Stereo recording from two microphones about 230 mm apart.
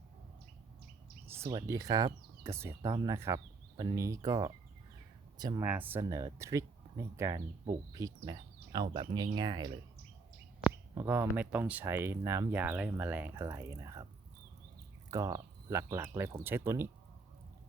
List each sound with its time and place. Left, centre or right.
1.3 s speech: centre
15.1 s speech: centre